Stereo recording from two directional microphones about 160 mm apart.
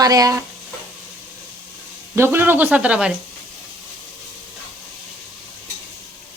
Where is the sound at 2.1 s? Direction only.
15° right (ahead or behind).